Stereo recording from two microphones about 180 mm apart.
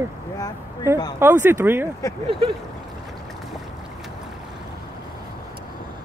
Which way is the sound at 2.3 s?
30° right (ahead or behind).